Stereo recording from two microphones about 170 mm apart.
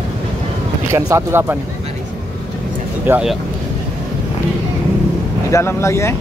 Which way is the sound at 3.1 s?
5° right (ahead or behind).